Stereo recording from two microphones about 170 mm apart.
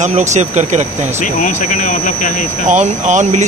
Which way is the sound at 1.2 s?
45° left (ahead or behind).